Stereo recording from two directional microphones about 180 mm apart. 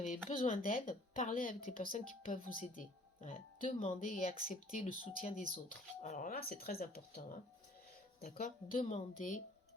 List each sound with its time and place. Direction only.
0.3 s a woman's voice: 45° left (ahead or behind)
8.8 s speech: 35° left (ahead or behind)